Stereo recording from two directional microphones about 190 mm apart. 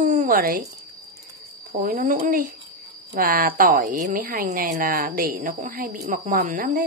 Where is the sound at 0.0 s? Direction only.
40° right (ahead or behind).